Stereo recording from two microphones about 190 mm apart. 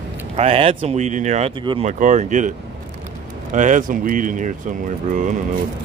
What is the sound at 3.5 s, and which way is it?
Speech, 40° right (ahead or behind).